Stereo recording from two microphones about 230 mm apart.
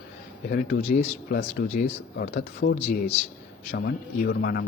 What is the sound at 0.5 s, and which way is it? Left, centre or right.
Speech, left.